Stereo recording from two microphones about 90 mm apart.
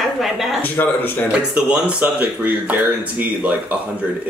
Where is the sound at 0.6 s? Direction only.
20° left (ahead or behind).